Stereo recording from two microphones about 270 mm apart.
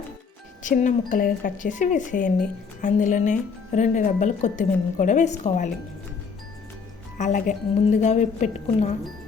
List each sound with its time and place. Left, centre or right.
0.6 s speech: left
7.2 s speech: left